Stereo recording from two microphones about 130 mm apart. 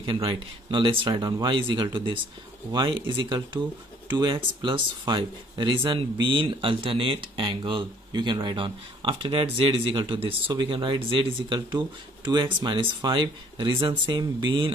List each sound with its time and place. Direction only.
0.0 s speech: 40° right (ahead or behind)